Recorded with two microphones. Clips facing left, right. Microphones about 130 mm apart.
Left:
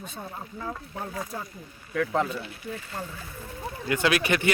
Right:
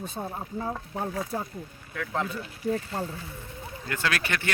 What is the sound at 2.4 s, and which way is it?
Speech, 40° right (ahead or behind).